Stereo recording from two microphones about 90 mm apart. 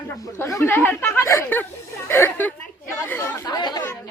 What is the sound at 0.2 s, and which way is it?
Speech, 35° left (ahead or behind).